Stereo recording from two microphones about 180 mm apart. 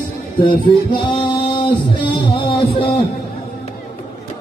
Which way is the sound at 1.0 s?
25° left (ahead or behind).